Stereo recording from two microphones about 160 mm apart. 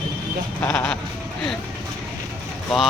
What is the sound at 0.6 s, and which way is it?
Speech, 10° left (ahead or behind).